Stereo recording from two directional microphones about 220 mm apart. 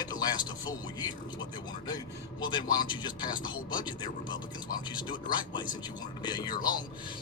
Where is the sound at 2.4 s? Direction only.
20° left (ahead or behind).